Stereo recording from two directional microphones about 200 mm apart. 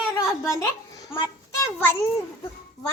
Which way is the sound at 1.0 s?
20° left (ahead or behind).